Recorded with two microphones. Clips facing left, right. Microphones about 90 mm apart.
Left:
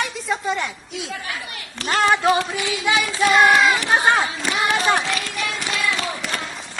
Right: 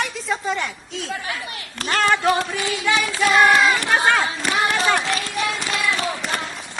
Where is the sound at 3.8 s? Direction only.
20° left (ahead or behind).